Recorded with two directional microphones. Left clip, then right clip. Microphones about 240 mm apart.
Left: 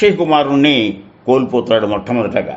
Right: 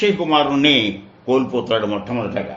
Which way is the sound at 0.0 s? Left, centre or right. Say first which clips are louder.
Left 5 dB; left.